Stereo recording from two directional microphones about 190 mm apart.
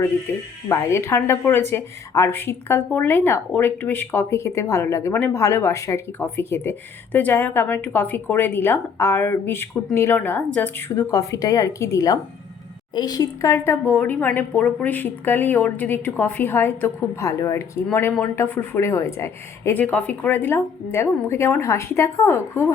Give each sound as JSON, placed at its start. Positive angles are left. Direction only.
{"t": 0.7, "sound": "speech", "side_deg": 15}